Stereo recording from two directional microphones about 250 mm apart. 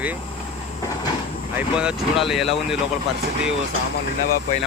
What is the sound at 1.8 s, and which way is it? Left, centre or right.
Speech, centre.